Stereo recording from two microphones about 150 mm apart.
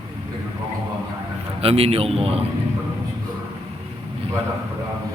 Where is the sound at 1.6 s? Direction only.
40° right (ahead or behind).